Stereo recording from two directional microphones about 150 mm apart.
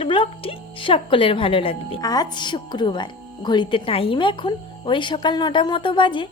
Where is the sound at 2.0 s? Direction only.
25° left (ahead or behind).